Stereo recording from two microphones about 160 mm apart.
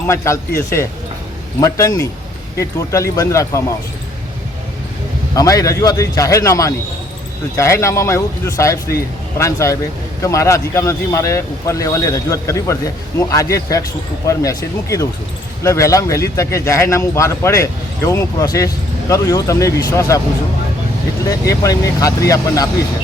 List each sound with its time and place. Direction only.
0.1 s speech: 15° left (ahead or behind)
5.3 s speech: 20° left (ahead or behind)
21.2 s speech: 20° left (ahead or behind)